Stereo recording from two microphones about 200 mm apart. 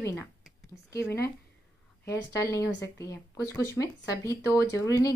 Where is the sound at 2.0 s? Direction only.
15° left (ahead or behind).